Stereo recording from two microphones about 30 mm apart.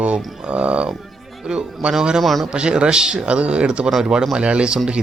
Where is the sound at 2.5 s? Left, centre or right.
Right.